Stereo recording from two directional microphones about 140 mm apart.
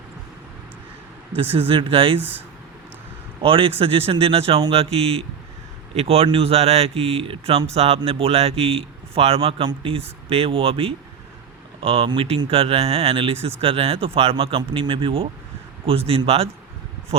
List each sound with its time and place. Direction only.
1.5 s speech: 40° right (ahead or behind)
3.4 s speech: 40° right (ahead or behind)